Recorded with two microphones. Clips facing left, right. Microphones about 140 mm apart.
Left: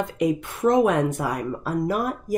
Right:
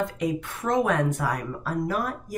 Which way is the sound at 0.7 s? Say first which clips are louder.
Left 5 dB; 15° left (ahead or behind).